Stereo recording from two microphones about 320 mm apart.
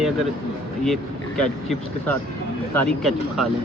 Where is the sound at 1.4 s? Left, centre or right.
Centre.